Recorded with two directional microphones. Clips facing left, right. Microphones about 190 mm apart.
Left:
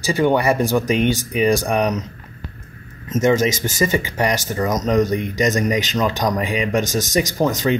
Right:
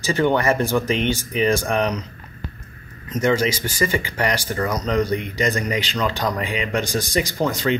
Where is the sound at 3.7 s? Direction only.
20° left (ahead or behind).